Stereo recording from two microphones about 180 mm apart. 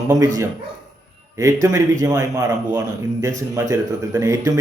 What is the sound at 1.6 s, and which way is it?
A man's voice, 20° right (ahead or behind).